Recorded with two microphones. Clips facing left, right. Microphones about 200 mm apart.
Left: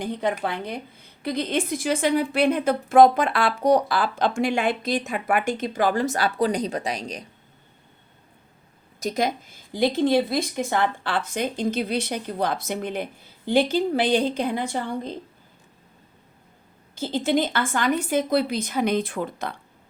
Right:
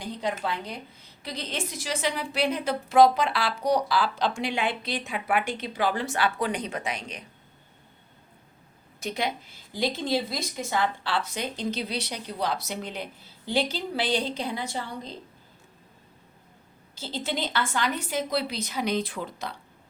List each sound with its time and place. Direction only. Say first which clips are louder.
0.0 s a woman's voice: left 5 dB; 55° left (ahead or behind); by 7.3 s 35° left (ahead or behind)
9.0 s a woman's voice: left 5 dB; 40° left (ahead or behind)
16.9 s a woman's voice: left 9 dB; 50° left (ahead or behind)